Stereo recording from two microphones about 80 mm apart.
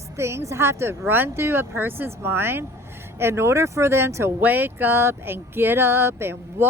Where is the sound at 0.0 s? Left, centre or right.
Right.